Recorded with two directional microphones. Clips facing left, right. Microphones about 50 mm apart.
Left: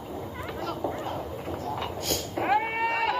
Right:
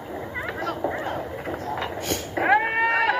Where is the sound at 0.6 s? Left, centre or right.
Right.